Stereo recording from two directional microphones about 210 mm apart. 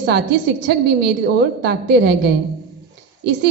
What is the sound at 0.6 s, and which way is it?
A woman's voice, 50° right (ahead or behind).